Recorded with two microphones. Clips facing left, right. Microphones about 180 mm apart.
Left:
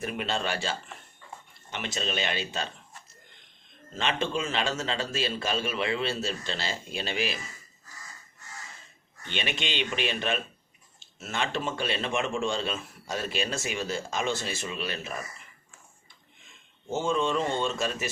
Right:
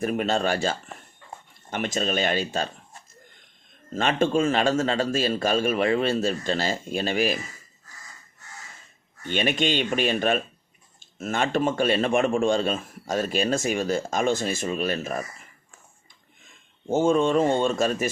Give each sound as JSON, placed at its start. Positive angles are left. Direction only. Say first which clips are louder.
{"t": 0.0, "sound": "a man's voice", "louder": "right 7 dB", "side_deg": -45}
{"t": 3.9, "sound": "a man's voice", "louder": "right 7 dB", "side_deg": -50}
{"t": 9.2, "sound": "a man's voice", "louder": "right 9 dB", "side_deg": -45}
{"t": 16.9, "sound": "a man's voice", "louder": "right 7 dB", "side_deg": -50}